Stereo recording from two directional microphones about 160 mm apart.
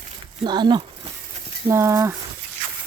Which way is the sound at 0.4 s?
25° right (ahead or behind).